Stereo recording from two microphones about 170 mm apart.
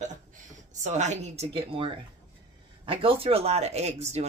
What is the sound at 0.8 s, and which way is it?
Speech, 45° right (ahead or behind).